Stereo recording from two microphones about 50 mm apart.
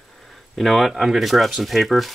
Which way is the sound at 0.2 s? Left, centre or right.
Centre.